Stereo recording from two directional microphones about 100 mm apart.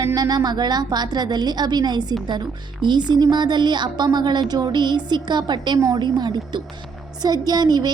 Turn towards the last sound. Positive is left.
turn(degrees=-40)  # may be behind; listen again after turning